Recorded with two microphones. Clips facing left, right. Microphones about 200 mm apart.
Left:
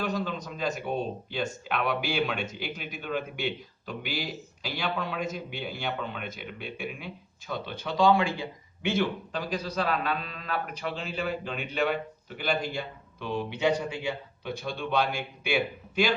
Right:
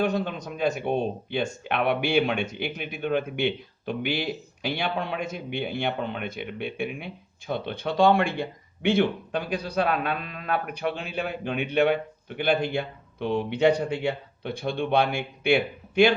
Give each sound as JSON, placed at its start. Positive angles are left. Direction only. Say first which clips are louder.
{"t": 0.3, "sound": "speech", "louder": "right 5 dB", "side_deg": -60}